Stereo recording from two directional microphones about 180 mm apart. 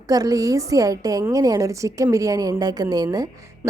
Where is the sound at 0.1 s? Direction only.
20° right (ahead or behind).